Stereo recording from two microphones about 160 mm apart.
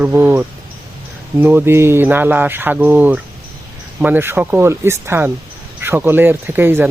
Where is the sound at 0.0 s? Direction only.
10° right (ahead or behind).